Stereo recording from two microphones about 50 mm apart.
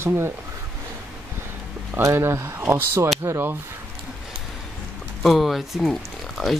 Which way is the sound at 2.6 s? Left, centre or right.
Right.